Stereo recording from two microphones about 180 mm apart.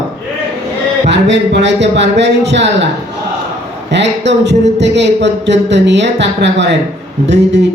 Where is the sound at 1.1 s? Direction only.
75° right (ahead or behind).